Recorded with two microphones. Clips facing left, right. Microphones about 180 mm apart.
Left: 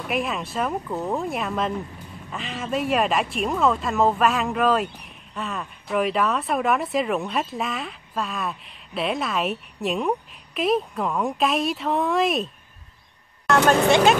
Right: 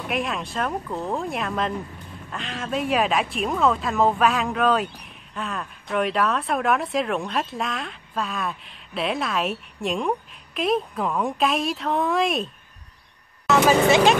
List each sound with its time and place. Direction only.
0.0 s speech: centre (ahead or behind)
13.7 s speech: centre (ahead or behind)